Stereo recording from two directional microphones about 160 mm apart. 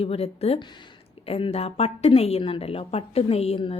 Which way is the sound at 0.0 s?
40° left (ahead or behind).